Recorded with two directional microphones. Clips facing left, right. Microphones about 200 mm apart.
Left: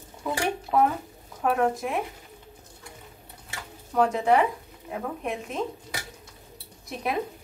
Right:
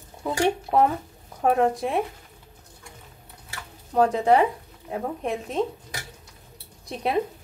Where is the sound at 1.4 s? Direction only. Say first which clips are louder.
Right 3 dB; 35° right (ahead or behind).